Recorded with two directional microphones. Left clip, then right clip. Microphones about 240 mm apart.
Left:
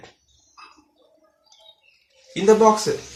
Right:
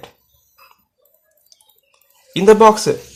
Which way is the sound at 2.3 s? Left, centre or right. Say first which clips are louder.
Right 6 dB; right.